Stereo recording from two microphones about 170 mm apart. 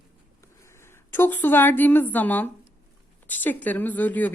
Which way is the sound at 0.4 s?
15° left (ahead or behind).